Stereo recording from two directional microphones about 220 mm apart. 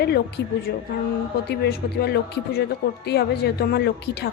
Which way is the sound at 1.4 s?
45° left (ahead or behind).